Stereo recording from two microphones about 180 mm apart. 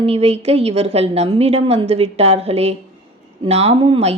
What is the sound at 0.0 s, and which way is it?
Speech, 35° right (ahead or behind).